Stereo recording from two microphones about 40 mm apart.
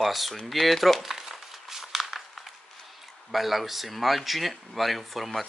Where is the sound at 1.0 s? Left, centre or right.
Centre.